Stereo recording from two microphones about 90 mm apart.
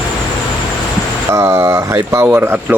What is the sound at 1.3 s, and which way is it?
Speech, 35° right (ahead or behind).